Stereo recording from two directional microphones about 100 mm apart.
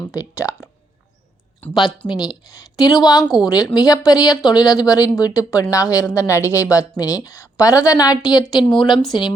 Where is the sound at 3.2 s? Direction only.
Centre (ahead or behind).